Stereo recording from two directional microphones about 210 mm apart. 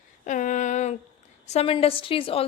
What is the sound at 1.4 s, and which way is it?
A woman's voice, 30° left (ahead or behind).